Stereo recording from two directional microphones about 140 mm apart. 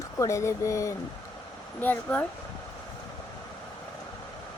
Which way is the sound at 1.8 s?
10° left (ahead or behind).